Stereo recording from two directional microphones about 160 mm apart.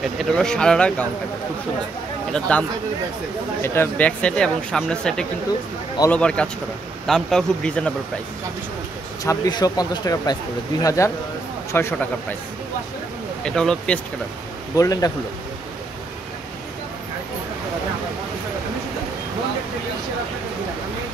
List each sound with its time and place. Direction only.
0.0 s speech: centre (ahead or behind)
2.3 s speech: 5° left (ahead or behind)
3.6 s speech: 15° left (ahead or behind)
9.2 s speech: 20° left (ahead or behind)
13.4 s speech: 5° left (ahead or behind)
14.8 s speech: 25° left (ahead or behind)